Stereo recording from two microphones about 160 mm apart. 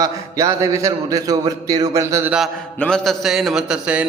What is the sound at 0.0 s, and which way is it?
A man's voice, 20° right (ahead or behind).